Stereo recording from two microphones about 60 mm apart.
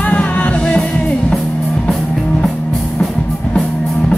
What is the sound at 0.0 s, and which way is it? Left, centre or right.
Music, left.